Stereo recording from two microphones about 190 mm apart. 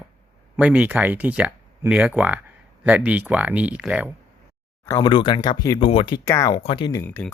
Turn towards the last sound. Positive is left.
turn(degrees=10)  # may be behind; listen again after turning